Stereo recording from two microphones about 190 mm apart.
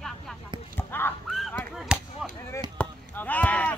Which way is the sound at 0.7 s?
10° left (ahead or behind).